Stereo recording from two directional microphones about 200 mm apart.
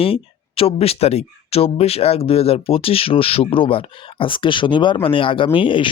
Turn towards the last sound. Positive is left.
turn(degrees=25)  # may be behind; listen again after turning